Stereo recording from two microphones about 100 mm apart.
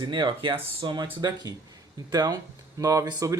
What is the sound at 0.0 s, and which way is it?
Speech, 50° right (ahead or behind).